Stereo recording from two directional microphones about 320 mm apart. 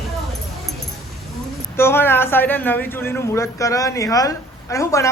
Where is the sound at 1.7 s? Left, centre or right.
Centre.